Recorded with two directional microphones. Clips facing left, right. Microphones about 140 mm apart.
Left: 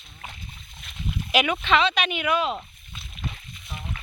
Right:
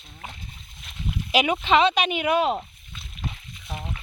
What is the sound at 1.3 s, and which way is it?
Speech, 30° right (ahead or behind).